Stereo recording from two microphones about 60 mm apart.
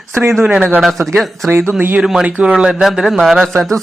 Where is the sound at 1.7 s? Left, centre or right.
Right.